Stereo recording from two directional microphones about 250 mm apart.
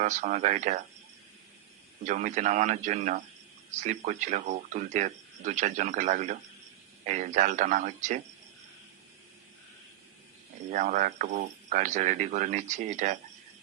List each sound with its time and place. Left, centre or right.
0.0 s speech: right
2.0 s speech: right
10.7 s speech: right